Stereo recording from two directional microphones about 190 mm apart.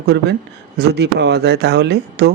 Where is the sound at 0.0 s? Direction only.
60° right (ahead or behind).